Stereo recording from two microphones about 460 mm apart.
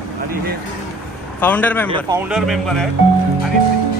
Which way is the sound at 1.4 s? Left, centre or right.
Centre.